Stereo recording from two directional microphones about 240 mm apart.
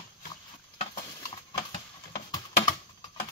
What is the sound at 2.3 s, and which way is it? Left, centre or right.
Computer keyboard, centre.